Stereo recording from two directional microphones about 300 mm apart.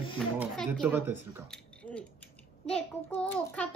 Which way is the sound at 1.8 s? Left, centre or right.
Centre.